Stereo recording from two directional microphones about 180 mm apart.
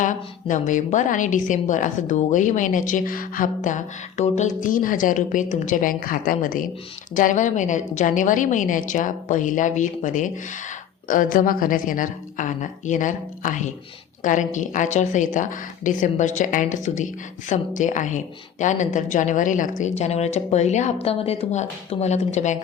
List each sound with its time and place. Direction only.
0.0 s a woman's voice: 45° left (ahead or behind)